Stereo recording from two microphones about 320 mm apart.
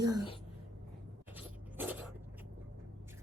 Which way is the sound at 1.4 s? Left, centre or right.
Centre.